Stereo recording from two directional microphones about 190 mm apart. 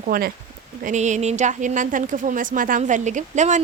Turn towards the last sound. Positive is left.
turn(degrees=-40)  # may be behind; listen again after turning